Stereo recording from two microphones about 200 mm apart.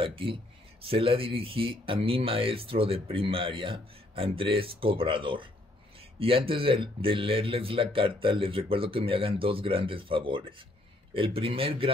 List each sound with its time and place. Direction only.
0.0 s speech: 25° right (ahead or behind)